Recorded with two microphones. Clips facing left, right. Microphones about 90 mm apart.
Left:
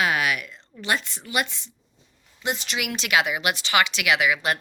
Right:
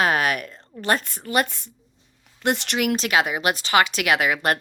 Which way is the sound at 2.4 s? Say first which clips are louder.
Right 5 dB; 60° right (ahead or behind).